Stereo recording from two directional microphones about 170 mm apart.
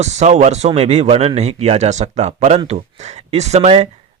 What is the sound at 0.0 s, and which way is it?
Speech, 40° right (ahead or behind).